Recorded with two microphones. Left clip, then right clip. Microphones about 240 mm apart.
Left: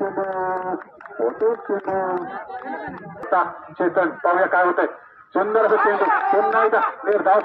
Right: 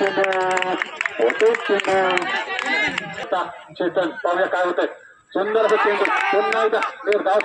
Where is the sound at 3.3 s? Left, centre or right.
Right.